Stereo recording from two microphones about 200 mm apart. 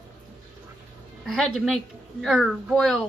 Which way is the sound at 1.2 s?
Centre (ahead or behind).